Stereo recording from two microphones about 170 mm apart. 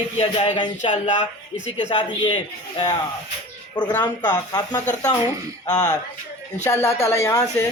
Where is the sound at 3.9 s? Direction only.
10° left (ahead or behind).